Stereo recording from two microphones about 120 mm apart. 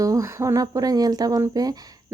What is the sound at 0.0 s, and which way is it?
Speech, 25° right (ahead or behind).